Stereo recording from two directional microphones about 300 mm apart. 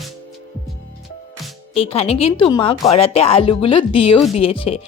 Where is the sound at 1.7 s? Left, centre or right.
Centre.